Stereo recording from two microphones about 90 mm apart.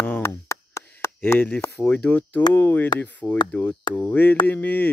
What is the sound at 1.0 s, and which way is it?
Chop, 25° left (ahead or behind).